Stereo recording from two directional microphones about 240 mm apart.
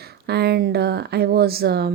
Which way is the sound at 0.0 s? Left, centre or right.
Right.